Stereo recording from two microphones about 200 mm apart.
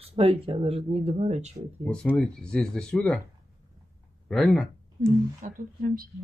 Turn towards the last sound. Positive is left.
turn(degrees=-45)  # may be behind; listen again after turning